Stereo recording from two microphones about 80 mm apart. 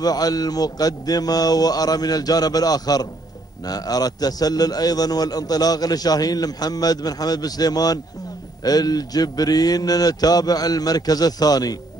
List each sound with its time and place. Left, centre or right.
0.0 s a man's voice: left